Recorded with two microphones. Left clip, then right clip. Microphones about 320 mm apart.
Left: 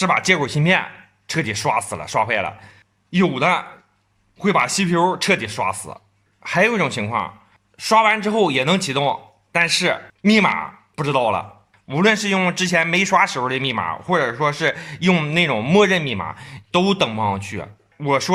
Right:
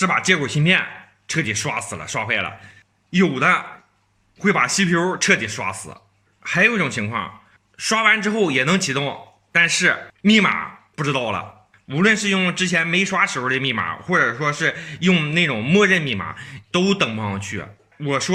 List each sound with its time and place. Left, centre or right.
0.0 s a man's voice: centre